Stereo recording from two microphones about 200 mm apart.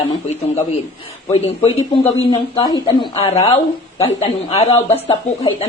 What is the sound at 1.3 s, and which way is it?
A woman's voice, 25° left (ahead or behind).